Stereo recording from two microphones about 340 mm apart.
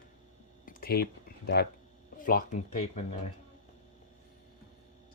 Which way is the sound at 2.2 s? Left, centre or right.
Left.